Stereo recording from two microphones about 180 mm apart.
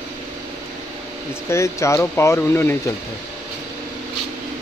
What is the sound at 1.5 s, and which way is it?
Speech, 15° left (ahead or behind).